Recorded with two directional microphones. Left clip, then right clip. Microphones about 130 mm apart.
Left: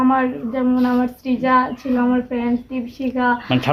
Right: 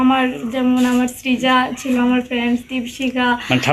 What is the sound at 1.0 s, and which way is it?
Speech, 20° left (ahead or behind).